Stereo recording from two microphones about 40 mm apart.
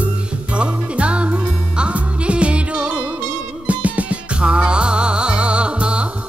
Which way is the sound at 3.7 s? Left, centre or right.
Right.